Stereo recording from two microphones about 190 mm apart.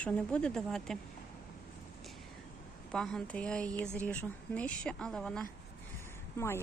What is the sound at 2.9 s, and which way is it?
A woman's voice, 5° left (ahead or behind).